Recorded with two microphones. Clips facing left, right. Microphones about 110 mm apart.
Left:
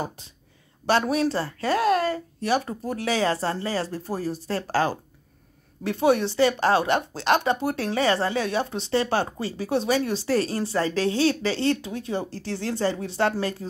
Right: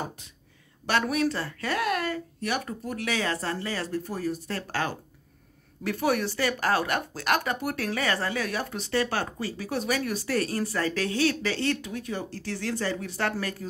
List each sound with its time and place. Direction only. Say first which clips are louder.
0.2 s speech: left 2 dB; 30° left (ahead or behind)